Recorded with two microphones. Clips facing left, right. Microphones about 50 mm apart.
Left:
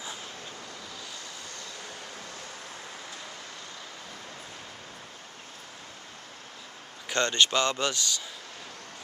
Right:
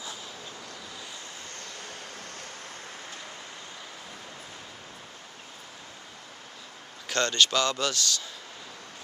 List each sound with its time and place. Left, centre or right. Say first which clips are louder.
1.6 s vehicle: even; right
7.1 s speech: even; left